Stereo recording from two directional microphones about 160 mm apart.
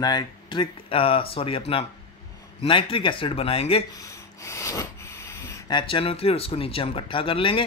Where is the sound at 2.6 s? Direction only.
35° left (ahead or behind).